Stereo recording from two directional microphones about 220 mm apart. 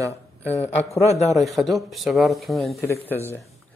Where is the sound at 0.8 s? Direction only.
30° left (ahead or behind).